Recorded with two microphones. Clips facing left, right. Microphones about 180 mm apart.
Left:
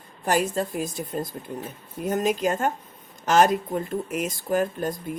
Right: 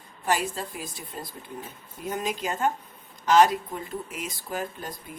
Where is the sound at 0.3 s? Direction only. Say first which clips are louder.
Left 4 dB; 45° left (ahead or behind).